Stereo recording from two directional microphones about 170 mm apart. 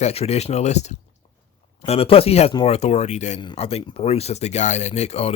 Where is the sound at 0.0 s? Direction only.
35° left (ahead or behind).